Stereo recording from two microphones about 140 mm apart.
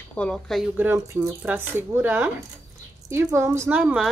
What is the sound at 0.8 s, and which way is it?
Speech, 15° right (ahead or behind).